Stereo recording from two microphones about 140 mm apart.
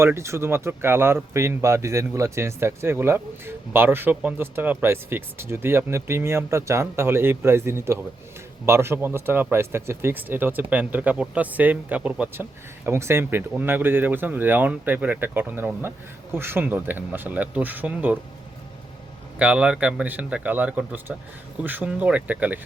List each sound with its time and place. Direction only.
0.0 s speech: 20° right (ahead or behind)
19.4 s speech: 10° right (ahead or behind)